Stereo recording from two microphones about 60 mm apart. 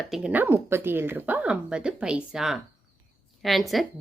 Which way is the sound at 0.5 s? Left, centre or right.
Right.